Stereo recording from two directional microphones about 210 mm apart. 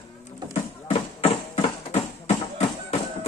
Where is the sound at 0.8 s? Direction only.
30° left (ahead or behind).